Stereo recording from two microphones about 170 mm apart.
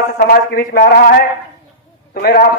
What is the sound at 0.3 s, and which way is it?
Speech, 60° left (ahead or behind).